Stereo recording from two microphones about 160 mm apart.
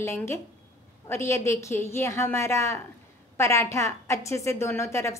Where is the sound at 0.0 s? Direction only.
15° left (ahead or behind).